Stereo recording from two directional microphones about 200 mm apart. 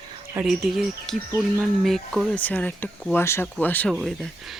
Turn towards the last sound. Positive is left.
turn(degrees=0)  # may be behind; listen again after turning